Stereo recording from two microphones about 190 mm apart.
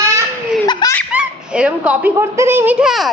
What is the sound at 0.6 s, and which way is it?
Laughter, 20° left (ahead or behind).